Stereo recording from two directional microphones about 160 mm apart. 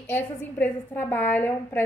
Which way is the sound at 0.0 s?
15° left (ahead or behind).